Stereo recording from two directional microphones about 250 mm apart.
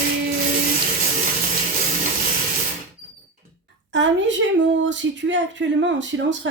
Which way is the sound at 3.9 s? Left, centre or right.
Right.